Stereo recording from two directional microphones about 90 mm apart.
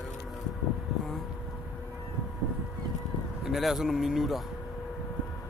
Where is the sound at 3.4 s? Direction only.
5° right (ahead or behind).